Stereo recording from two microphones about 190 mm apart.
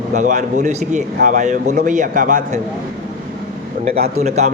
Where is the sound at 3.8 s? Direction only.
35° right (ahead or behind).